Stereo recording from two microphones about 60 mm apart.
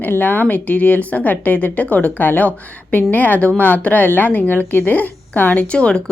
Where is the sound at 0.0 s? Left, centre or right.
Left.